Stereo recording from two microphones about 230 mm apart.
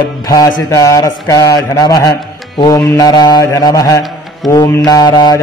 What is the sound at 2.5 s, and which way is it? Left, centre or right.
Music, centre.